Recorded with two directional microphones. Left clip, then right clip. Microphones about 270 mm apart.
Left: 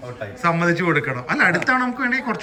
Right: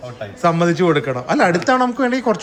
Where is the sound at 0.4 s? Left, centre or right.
Centre.